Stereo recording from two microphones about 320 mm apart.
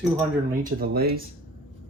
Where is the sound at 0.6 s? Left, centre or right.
Right.